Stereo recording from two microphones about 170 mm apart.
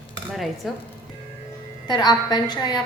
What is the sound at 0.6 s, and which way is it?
Speech, centre (ahead or behind).